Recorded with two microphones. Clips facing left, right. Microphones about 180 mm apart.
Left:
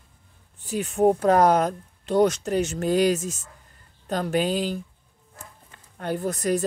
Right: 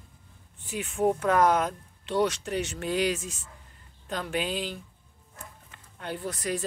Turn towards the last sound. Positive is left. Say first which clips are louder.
# left 7 dB
turn(degrees=45)  # may be behind; listen again after turning